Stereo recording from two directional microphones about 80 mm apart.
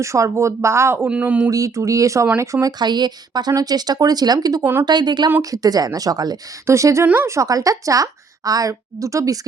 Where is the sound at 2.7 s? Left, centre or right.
Right.